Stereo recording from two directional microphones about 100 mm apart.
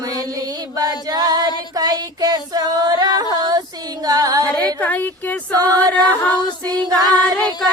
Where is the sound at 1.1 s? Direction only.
40° right (ahead or behind).